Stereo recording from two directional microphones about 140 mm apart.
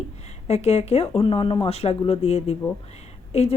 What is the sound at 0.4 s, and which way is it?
Speech, 50° left (ahead or behind).